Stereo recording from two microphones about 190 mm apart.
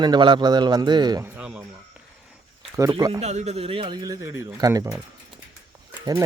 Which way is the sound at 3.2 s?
35° right (ahead or behind).